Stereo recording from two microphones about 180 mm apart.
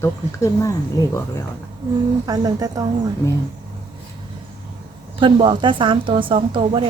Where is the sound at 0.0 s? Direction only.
15° left (ahead or behind).